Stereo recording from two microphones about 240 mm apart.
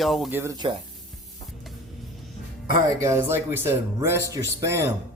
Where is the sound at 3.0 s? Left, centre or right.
Centre.